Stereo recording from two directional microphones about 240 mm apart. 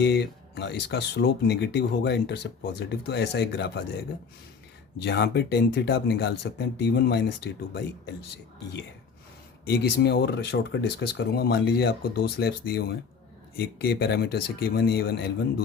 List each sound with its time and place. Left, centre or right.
0.0 s speech: left
4.9 s speech: left
9.6 s speech: left